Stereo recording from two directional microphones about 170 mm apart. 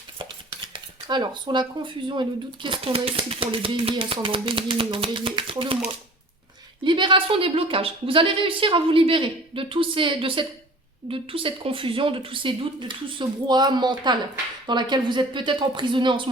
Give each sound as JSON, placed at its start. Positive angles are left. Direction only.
{"t": 0.2, "sound": "dishes", "side_deg": -30}
{"t": 6.8, "sound": "a woman's voice", "side_deg": -30}
{"t": 11.1, "sound": "dishes", "side_deg": -30}